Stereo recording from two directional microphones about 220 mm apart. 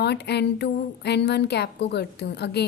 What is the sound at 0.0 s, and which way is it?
A woman's voice, 50° left (ahead or behind).